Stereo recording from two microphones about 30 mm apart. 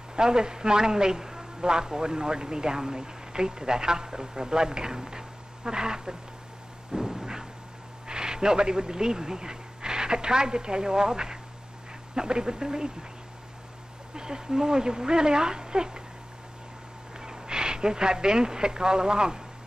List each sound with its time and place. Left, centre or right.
0.1 s a man's voice: right
6.9 s a sound: centre
8.1 s a man's voice: right
14.1 s a man's voice: right
17.2 s speech: right